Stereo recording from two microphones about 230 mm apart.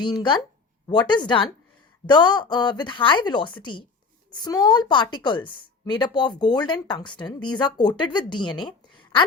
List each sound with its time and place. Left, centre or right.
0.0 s a woman's voice: centre